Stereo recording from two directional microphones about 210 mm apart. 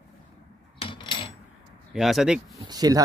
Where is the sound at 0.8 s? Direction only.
25° left (ahead or behind).